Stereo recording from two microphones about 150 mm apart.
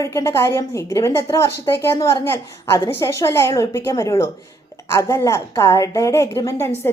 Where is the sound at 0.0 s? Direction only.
20° left (ahead or behind).